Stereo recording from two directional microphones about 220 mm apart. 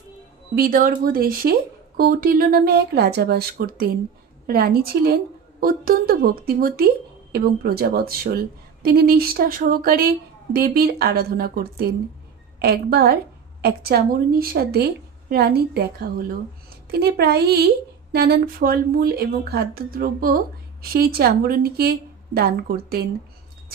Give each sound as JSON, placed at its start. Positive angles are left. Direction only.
{"t": 0.6, "sound": "a woman's voice", "side_deg": -40}